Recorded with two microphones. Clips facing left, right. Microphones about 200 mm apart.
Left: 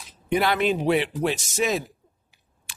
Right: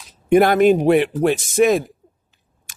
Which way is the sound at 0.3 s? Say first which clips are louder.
Right 10 dB; 50° right (ahead or behind).